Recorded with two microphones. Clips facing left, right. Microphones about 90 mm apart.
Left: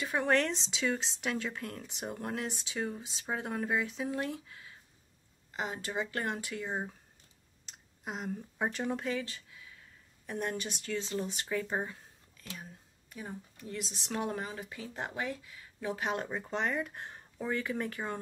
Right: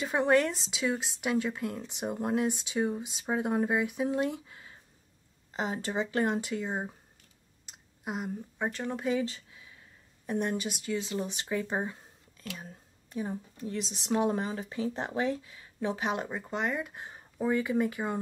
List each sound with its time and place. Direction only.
0.0 s speech: 20° right (ahead or behind)
0.3 s speech: 10° right (ahead or behind)
7.6 s a sound: 5° right (ahead or behind)
9.1 s speech: 20° right (ahead or behind)
13.1 s speech: 25° right (ahead or behind); by 18.2 s 10° right (ahead or behind)